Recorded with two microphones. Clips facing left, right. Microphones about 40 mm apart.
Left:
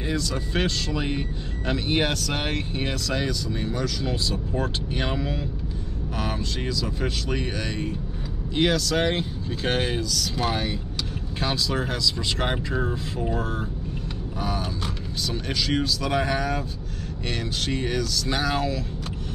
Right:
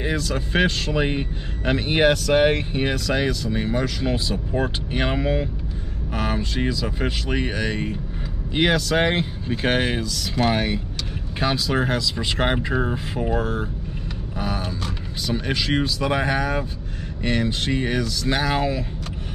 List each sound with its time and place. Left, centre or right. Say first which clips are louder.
0.0 s speech: right 3 dB; right
14.4 s a sound: right 1 dB; centre
15.2 s speech: right 4 dB; right